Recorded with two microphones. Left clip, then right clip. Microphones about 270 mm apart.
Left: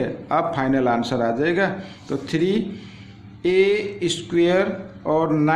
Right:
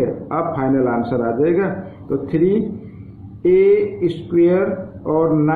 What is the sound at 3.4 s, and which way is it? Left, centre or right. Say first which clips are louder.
A man's voice: right 5 dB; left.